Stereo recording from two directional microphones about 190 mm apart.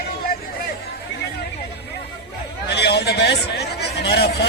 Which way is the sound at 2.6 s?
60° left (ahead or behind).